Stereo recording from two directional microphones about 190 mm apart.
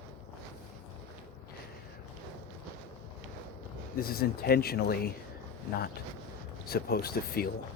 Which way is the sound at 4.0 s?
55° left (ahead or behind).